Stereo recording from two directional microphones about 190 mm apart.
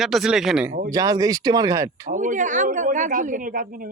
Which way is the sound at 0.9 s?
20° right (ahead or behind).